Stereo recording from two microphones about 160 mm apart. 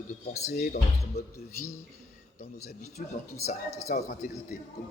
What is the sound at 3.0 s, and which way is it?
Speech, 60° left (ahead or behind).